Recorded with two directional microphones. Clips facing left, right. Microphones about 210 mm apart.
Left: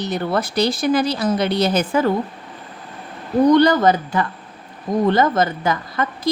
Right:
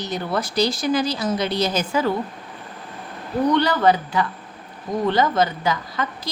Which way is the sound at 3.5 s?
40° left (ahead or behind).